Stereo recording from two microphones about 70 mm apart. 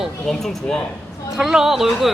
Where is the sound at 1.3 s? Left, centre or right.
Centre.